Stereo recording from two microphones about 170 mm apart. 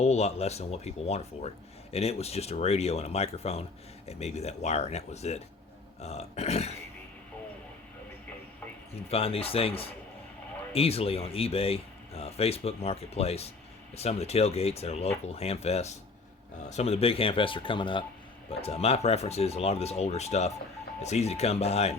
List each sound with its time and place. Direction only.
0.0 s speech: 40° left (ahead or behind)
9.0 s speech: 35° left (ahead or behind)